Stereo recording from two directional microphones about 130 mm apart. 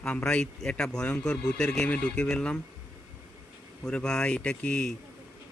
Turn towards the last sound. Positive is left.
turn(degrees=5)  # may be behind; listen again after turning